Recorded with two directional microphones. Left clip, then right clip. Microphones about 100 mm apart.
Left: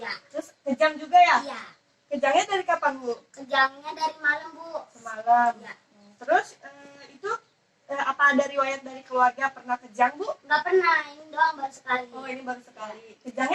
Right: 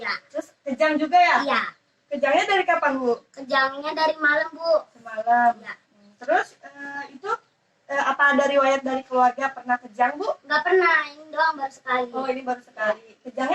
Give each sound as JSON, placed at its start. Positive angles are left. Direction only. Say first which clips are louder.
{"t": 0.0, "sound": "a child's voice", "louder": "right 5 dB", "side_deg": -30}